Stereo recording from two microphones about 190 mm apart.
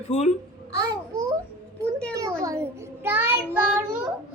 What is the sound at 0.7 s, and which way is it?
Babbling, 20° right (ahead or behind).